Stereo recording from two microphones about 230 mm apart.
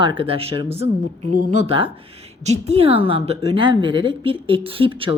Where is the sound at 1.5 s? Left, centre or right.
Right.